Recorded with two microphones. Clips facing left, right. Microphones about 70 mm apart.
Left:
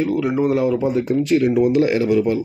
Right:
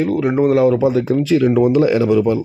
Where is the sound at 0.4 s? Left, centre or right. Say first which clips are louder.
Right 7 dB; right.